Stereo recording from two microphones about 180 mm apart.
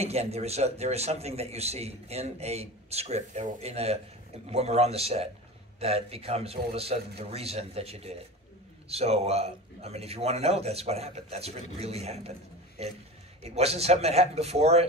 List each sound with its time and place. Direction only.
0.0 s a man's voice: 35° right (ahead or behind)